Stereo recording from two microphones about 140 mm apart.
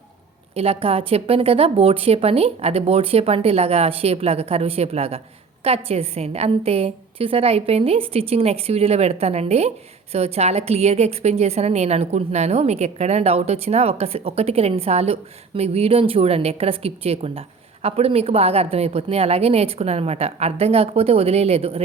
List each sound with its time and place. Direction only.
0.5 s a woman's voice: 45° right (ahead or behind)